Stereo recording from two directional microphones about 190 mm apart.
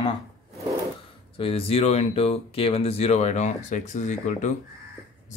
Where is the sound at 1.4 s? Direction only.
30° left (ahead or behind).